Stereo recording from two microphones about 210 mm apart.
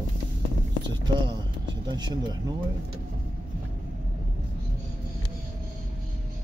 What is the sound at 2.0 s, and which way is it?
Speech, 20° right (ahead or behind).